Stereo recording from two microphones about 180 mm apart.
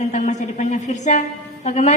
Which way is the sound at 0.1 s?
40° left (ahead or behind).